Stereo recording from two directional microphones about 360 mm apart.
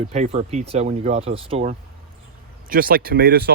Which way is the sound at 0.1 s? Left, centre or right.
Centre.